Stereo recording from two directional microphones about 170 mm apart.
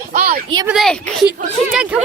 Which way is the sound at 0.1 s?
55° right (ahead or behind).